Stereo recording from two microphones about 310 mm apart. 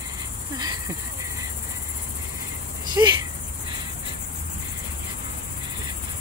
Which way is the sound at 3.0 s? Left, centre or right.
Centre.